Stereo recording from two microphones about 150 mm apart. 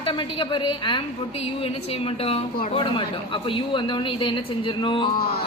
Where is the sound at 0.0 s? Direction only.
35° left (ahead or behind).